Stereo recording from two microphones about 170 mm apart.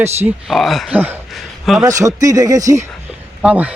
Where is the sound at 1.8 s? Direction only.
20° right (ahead or behind).